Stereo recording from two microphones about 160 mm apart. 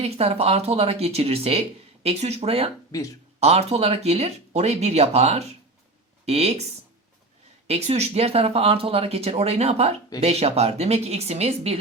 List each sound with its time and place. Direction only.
0.0 s speech: 40° right (ahead or behind)
2.9 s speech: 20° left (ahead or behind)
3.4 s speech: 40° right (ahead or behind)
7.7 s speech: 40° right (ahead or behind)